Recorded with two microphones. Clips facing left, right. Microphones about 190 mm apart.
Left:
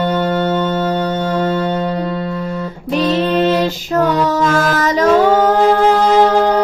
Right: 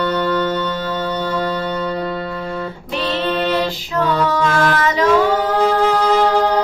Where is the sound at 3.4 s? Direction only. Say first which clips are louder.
Left 5 dB; 45° left (ahead or behind).